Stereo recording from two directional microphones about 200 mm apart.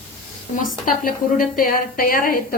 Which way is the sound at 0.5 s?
45° left (ahead or behind).